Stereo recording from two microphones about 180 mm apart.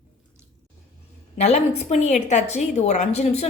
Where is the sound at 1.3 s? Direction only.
40° left (ahead or behind).